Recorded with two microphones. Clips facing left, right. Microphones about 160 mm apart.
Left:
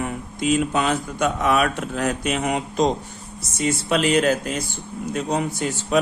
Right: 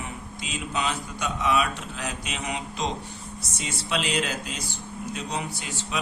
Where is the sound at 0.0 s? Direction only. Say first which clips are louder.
Left 12 dB; 50° left (ahead or behind).